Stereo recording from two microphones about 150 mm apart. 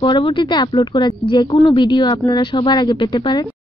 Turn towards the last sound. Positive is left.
turn(degrees=30)  # may be behind; listen again after turning